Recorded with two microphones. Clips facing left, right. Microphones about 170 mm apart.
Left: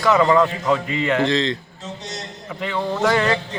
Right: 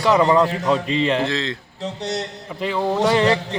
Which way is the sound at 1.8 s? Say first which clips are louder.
Right 7 dB; 65° right (ahead or behind).